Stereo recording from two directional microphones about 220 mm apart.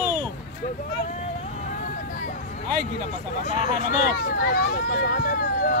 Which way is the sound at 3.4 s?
35° left (ahead or behind).